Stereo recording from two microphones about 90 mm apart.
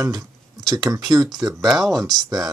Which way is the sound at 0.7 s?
40° right (ahead or behind).